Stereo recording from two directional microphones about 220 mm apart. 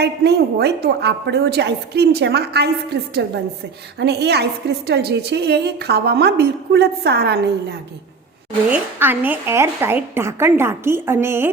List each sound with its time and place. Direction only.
0.0 s a woman's voice: 50° right (ahead or behind)
8.7 s a woman's voice: 10° right (ahead or behind)